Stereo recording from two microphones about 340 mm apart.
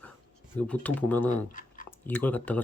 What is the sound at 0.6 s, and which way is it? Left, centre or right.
Speech, centre.